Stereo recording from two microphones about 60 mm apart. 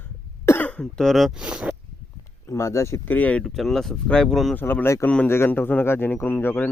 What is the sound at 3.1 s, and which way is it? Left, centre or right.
Speech, left.